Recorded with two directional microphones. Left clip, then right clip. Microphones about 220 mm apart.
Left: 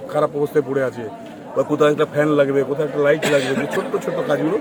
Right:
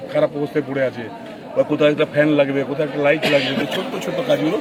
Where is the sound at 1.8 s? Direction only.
15° left (ahead or behind).